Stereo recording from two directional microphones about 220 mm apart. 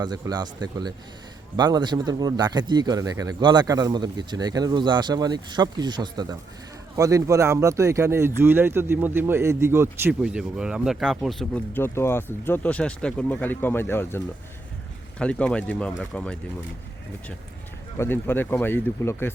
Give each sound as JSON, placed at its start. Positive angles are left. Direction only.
{"t": 0.0, "sound": "speech", "side_deg": -20}
{"t": 15.2, "sound": "speech", "side_deg": 5}
{"t": 17.9, "sound": "speech", "side_deg": 10}